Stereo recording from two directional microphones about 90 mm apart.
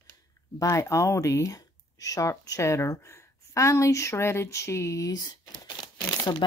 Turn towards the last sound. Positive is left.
turn(degrees=45)  # may be behind; listen again after turning